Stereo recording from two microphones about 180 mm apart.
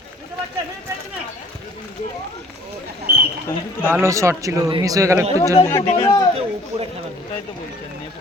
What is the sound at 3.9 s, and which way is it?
Speech, 15° right (ahead or behind).